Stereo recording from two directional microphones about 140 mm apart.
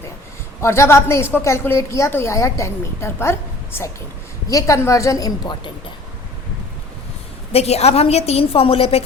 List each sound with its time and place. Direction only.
0.6 s a woman's voice: 20° left (ahead or behind)
7.5 s a woman's voice: 50° left (ahead or behind)